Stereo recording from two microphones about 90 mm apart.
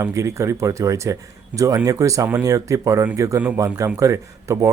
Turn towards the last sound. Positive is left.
turn(degrees=-35)  # may be behind; listen again after turning